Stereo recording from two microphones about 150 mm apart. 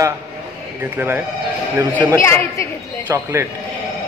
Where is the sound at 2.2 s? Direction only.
20° left (ahead or behind).